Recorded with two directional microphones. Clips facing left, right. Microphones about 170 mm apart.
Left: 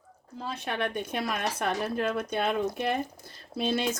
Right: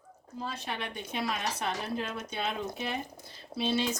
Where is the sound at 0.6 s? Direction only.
55° left (ahead or behind).